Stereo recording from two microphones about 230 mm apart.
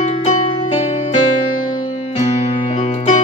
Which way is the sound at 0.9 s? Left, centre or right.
Left.